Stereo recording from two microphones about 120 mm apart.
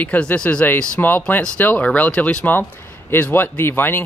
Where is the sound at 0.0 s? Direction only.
15° left (ahead or behind).